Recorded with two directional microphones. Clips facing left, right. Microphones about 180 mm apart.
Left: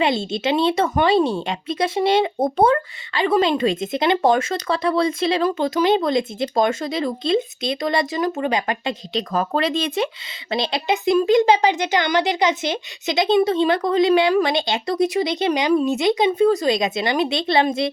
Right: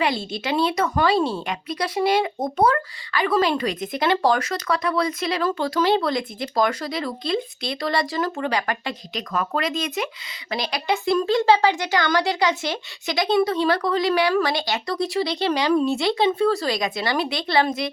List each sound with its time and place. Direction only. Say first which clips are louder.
0.0 s speech: left 4 dB; 25° left (ahead or behind)